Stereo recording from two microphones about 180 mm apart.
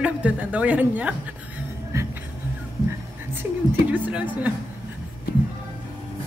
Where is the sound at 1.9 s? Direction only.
20° right (ahead or behind).